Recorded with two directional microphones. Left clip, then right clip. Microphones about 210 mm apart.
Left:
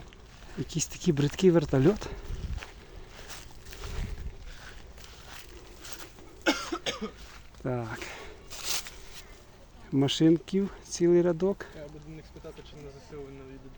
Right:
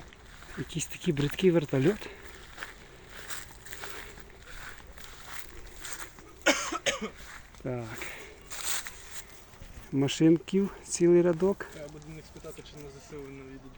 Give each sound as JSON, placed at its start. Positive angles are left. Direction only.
{"t": 0.7, "sound": "speech", "side_deg": 10}
{"t": 3.2, "sound": "walk", "side_deg": -15}
{"t": 5.3, "sound": "walk", "side_deg": -15}
{"t": 6.4, "sound": "cough", "side_deg": -30}
{"t": 7.6, "sound": "a sound", "side_deg": 15}
{"t": 8.5, "sound": "a sound", "side_deg": -5}
{"t": 9.9, "sound": "speech", "side_deg": 5}
{"t": 10.6, "sound": "speech", "side_deg": -5}
{"t": 13.1, "sound": "speech", "side_deg": -55}